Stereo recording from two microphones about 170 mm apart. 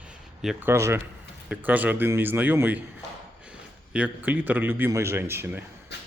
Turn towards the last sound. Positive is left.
turn(degrees=85)